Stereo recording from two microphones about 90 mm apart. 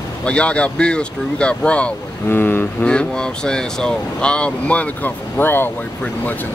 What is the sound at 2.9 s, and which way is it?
Speech, 10° left (ahead or behind).